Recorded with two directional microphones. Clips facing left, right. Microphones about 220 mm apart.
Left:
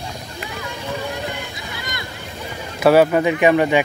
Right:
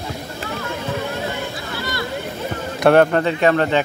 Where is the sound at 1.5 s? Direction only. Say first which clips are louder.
Right 5 dB; 20° left (ahead or behind).